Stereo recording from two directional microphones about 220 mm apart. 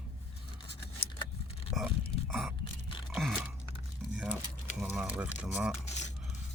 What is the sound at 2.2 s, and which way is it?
Gasp, centre (ahead or behind).